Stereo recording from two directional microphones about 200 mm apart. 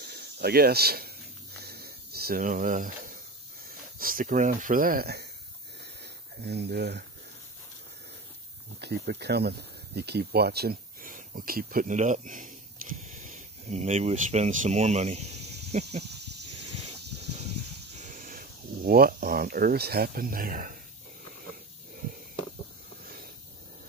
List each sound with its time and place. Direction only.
0.0 s snake: 55° right (ahead or behind)
4.0 s speech: 45° right (ahead or behind)
6.4 s speech: 55° right (ahead or behind)
8.8 s speech: 55° right (ahead or behind); by 16.0 s 35° right (ahead or behind)
17.9 s speech: 40° right (ahead or behind)